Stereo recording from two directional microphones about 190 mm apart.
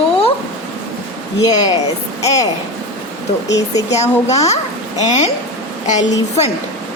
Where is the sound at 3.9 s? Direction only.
35° left (ahead or behind).